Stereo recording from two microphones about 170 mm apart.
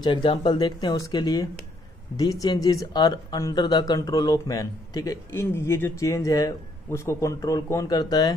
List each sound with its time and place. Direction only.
0.0 s speech: 30° left (ahead or behind)